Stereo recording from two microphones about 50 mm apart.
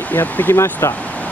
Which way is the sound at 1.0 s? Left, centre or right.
Left.